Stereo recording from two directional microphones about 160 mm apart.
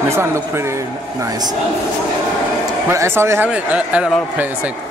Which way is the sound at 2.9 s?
15° right (ahead or behind).